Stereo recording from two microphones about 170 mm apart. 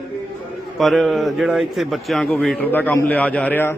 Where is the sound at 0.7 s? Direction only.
Centre (ahead or behind).